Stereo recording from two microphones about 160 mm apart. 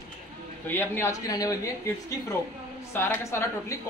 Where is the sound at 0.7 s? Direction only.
15° left (ahead or behind).